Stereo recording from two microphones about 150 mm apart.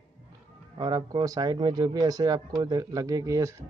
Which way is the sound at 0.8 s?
30° right (ahead or behind).